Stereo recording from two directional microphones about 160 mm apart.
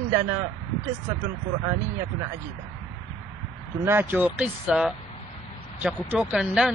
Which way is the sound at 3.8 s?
15° right (ahead or behind).